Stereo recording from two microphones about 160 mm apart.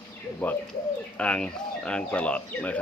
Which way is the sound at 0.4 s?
10° left (ahead or behind).